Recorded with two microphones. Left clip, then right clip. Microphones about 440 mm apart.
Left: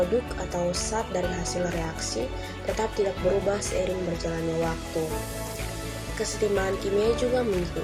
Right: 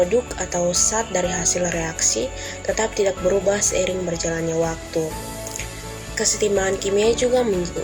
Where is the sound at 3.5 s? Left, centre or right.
Left.